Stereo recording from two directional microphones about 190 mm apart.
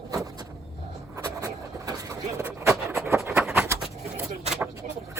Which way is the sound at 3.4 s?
5° right (ahead or behind).